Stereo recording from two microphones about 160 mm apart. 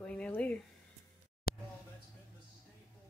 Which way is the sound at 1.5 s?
70° left (ahead or behind).